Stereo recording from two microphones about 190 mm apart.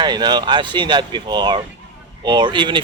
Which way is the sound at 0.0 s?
25° right (ahead or behind).